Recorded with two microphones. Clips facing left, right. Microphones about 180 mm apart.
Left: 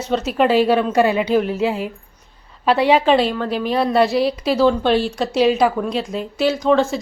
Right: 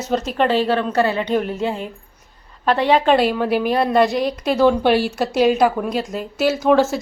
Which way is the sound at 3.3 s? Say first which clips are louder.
Right 3 dB; 10° right (ahead or behind).